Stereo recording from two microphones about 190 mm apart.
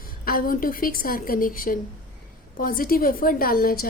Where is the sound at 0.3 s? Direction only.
50° left (ahead or behind).